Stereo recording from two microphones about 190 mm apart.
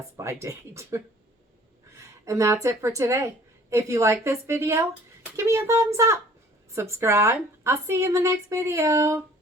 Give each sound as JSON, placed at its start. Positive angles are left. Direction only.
{"t": 0.2, "sound": "a woman's voice", "side_deg": -15}